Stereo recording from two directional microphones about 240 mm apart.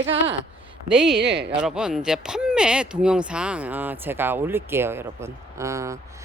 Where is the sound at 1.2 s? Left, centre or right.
Right.